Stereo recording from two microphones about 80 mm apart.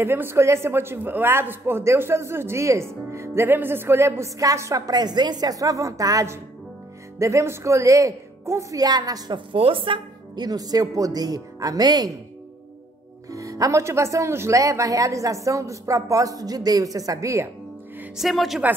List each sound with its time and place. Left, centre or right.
0.0 s a man's voice: right
9.3 s speech: right
13.3 s speech: right
18.1 s speech: centre